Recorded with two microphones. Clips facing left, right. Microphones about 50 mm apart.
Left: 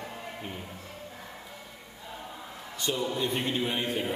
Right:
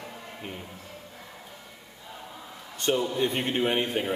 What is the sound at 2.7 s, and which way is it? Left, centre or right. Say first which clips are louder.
A man's voice: right 4 dB; right.